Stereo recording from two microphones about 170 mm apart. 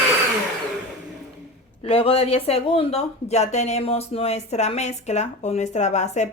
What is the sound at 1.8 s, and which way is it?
Speech, 35° left (ahead or behind).